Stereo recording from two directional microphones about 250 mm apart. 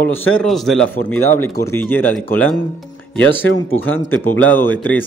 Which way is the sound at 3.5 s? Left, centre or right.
Left.